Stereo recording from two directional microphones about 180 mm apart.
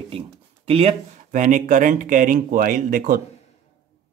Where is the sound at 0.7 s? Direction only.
35° right (ahead or behind); by 3.2 s 50° right (ahead or behind).